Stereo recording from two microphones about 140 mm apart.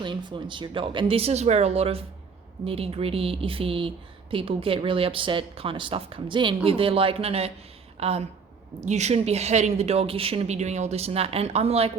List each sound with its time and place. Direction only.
0.0 s a woman's voice: 35° right (ahead or behind)